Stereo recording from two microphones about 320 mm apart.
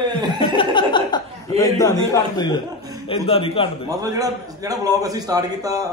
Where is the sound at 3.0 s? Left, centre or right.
Centre.